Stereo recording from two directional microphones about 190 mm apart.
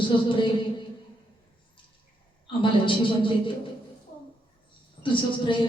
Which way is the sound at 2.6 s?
25° left (ahead or behind).